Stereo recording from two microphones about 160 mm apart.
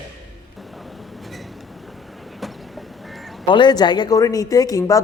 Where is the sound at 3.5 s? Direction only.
30° left (ahead or behind).